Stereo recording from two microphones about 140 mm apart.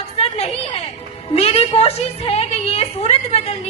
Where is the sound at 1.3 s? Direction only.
45° left (ahead or behind).